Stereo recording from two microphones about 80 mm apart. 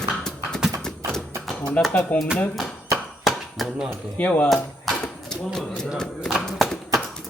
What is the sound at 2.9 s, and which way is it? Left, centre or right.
Chop, centre.